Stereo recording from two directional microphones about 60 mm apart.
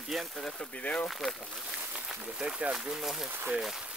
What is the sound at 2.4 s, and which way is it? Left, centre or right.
Speech, centre.